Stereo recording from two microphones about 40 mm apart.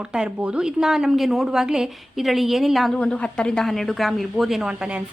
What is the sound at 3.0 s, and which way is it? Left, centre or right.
Speech, left.